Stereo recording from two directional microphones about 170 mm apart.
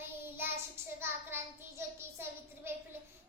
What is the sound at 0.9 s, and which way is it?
A child's voice, 15° right (ahead or behind).